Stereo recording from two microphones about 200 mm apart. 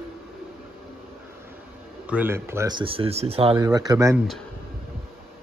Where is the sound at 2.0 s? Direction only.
10° right (ahead or behind).